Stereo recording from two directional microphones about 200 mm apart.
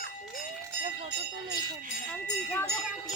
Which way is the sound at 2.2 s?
10° left (ahead or behind).